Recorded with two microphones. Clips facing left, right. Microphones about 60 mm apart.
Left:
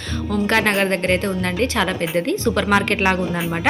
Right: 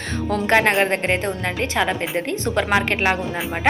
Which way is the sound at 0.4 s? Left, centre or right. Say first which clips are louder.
Right 1 dB; right.